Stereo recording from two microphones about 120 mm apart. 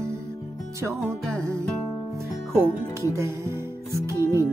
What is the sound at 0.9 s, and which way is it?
Music, 5° left (ahead or behind).